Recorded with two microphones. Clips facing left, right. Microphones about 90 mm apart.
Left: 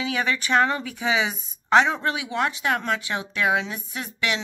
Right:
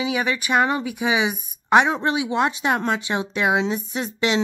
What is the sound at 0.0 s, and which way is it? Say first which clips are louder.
A woman's voice: right 2 dB; 10° right (ahead or behind).